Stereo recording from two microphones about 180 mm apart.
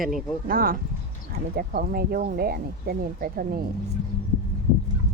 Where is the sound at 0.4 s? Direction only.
55° right (ahead or behind).